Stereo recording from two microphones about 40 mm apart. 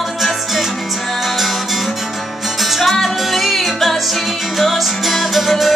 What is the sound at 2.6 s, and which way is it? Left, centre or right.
Music, centre.